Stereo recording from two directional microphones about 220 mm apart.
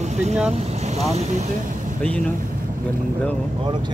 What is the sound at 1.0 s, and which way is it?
Speech, 30° right (ahead or behind).